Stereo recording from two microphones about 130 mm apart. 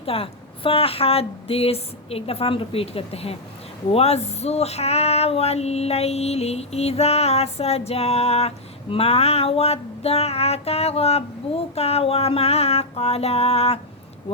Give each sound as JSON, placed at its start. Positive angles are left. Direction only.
{"t": 0.0, "sound": "female singing", "side_deg": 45}